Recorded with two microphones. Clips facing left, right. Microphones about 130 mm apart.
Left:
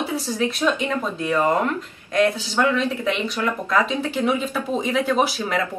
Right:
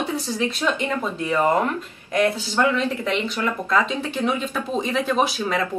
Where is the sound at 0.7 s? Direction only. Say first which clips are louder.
Left 1 dB; 15° right (ahead or behind).